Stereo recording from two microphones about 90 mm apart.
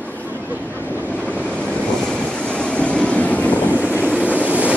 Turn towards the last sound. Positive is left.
turn(degrees=-15)  # may be behind; listen again after turning